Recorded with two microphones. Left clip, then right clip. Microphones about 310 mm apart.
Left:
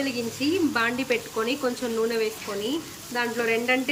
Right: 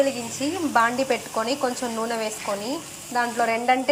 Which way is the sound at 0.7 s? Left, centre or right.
Centre.